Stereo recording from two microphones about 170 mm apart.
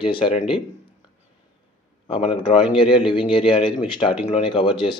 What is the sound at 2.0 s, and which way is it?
Speech, 30° left (ahead or behind).